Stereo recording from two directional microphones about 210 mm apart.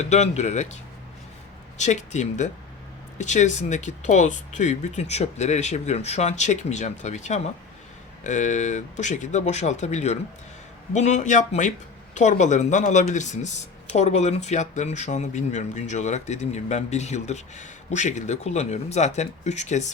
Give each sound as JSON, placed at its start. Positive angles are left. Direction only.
{"t": 0.0, "sound": "speech", "side_deg": 30}
{"t": 1.8, "sound": "speech", "side_deg": 35}